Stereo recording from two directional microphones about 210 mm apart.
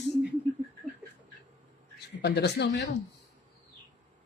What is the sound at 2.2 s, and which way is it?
Speech, 50° left (ahead or behind).